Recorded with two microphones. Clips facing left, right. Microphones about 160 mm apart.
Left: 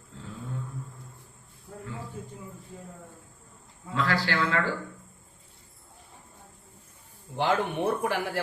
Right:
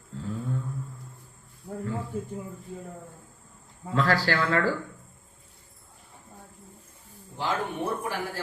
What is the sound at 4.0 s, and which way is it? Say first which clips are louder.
Speech: right 2 dB; 45° right (ahead or behind).